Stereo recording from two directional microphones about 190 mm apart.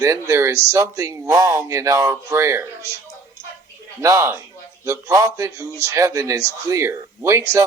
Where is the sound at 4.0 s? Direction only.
15° right (ahead or behind).